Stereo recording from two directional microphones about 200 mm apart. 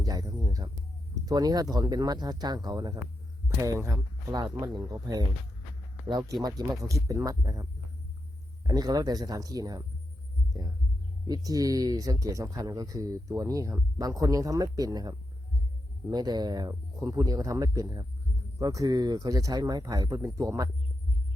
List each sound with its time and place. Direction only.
0.0 s a sound: 20° right (ahead or behind)
1.1 s speech: 20° right (ahead or behind)
11.3 s speech: 20° right (ahead or behind)